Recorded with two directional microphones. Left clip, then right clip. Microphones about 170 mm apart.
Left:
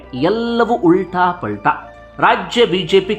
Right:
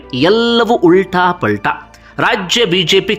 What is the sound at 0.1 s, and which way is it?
Speech, 20° right (ahead or behind).